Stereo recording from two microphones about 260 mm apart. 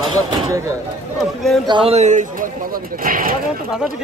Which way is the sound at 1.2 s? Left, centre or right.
Centre.